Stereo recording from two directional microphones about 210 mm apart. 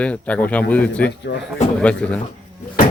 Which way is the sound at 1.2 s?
55° left (ahead or behind).